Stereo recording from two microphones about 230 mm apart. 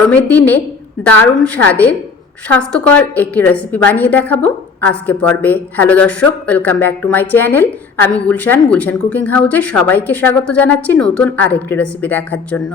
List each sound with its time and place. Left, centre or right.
0.0 s a woman's voice: centre